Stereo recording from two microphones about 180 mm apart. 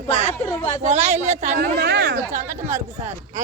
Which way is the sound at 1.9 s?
75° right (ahead or behind).